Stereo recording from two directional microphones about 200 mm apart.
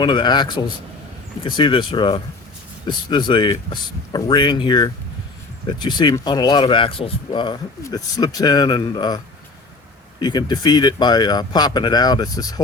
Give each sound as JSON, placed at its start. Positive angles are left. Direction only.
{"t": 0.0, "sound": "speech", "side_deg": 25}